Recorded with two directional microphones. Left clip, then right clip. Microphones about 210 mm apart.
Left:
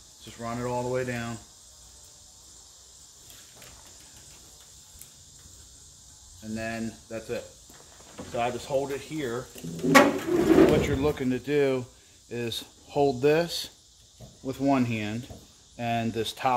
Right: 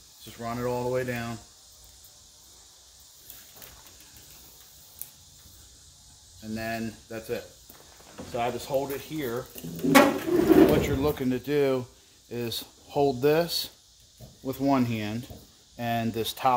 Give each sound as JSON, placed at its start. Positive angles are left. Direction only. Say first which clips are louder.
{"t": 0.2, "sound": "speech", "louder": "right 1 dB", "side_deg": -15}
{"t": 6.4, "sound": "speech", "louder": "right 1 dB", "side_deg": -20}
{"t": 9.8, "sound": "a sound", "louder": "left 1 dB", "side_deg": 10}
{"t": 10.8, "sound": "speech", "louder": "even", "side_deg": -15}